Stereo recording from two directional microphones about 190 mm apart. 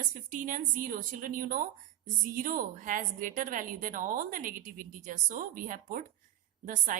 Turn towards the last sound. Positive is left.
turn(degrees=-45)  # may be behind; listen again after turning